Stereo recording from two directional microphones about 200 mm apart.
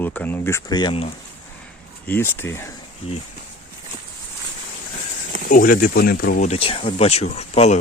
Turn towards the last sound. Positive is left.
turn(degrees=30)  # may be behind; listen again after turning